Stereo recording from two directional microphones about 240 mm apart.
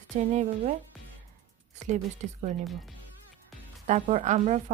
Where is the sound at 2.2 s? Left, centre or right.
Right.